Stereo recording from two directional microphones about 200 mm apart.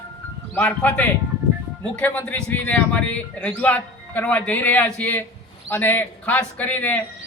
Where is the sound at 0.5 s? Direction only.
10° left (ahead or behind).